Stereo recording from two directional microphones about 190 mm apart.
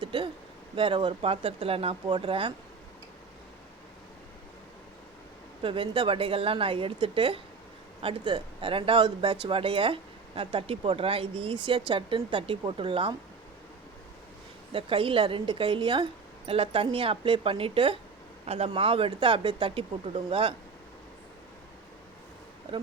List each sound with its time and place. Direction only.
0.0 s a sound: 25° right (ahead or behind)
0.8 s speech: 25° right (ahead or behind)
5.6 s speech: 30° right (ahead or behind)
14.7 s speech: 30° right (ahead or behind)